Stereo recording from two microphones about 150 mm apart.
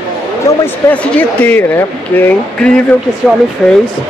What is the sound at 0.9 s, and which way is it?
Speech, 10° left (ahead or behind).